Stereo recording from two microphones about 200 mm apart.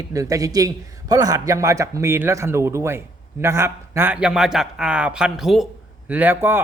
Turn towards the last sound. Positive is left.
turn(degrees=-10)  # may be behind; listen again after turning